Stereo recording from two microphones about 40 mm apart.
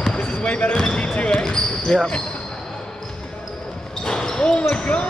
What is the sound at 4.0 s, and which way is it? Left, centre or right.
Basketball bounce, centre.